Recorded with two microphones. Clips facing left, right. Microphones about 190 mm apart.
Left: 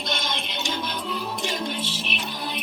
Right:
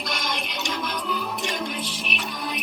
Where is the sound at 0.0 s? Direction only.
25° left (ahead or behind).